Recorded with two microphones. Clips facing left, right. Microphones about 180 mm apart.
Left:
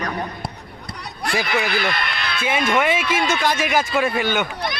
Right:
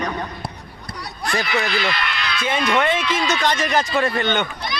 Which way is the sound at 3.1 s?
50° left (ahead or behind).